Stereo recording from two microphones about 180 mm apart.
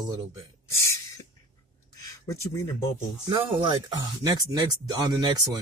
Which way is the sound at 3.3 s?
25° right (ahead or behind).